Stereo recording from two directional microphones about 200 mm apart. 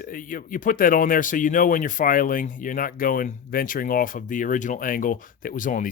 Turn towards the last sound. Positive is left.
turn(degrees=40)  # may be behind; listen again after turning